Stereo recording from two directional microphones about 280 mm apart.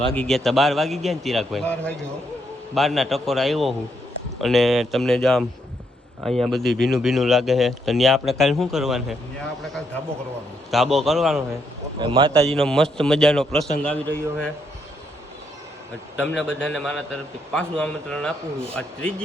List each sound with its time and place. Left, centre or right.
0.1 s a man's voice: centre
10.7 s a man's voice: centre
11.9 s a man's voice: centre
12.5 s a man's voice: centre
16.1 s a man's voice: centre